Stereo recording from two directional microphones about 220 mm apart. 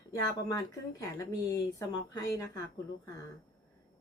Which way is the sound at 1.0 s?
15° left (ahead or behind).